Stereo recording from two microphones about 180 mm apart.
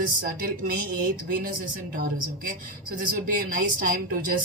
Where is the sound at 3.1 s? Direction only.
50° right (ahead or behind).